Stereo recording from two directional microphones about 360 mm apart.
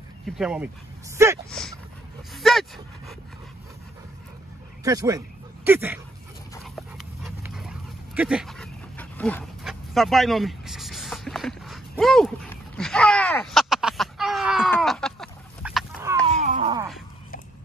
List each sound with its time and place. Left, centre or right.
0.4 s speech: centre
4.8 s speech: centre
6.5 s dog: centre
16.3 s groan: centre